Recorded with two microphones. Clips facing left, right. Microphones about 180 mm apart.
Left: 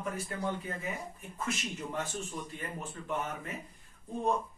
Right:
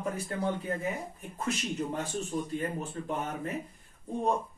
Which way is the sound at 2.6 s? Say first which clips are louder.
Right 7 dB; 35° right (ahead or behind).